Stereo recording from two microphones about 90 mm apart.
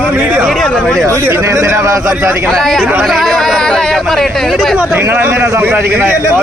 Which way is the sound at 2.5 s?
5° left (ahead or behind).